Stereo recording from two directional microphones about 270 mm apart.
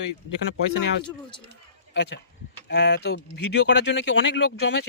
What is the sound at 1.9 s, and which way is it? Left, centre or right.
Speech, left.